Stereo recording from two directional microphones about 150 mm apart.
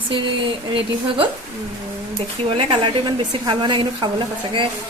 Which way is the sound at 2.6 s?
35° right (ahead or behind).